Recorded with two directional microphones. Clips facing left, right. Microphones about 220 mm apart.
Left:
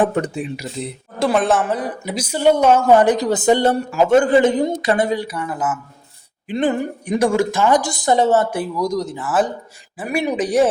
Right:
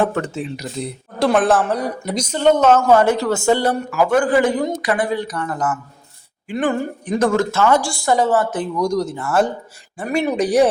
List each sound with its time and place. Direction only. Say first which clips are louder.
0.0 s a woman's voice: left 1 dB; 20° left (ahead or behind)
1.2 s a woman's voice: right 1 dB; centre (ahead or behind); by 5.1 s 25° left (ahead or behind)
5.1 s a woman's voice: even; 10° left (ahead or behind)
6.5 s a woman's voice: left 1 dB; 20° left (ahead or behind)
8.4 s speech: right 1 dB; 10° left (ahead or behind)